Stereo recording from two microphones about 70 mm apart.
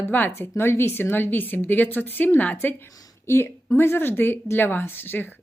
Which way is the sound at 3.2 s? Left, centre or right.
Left.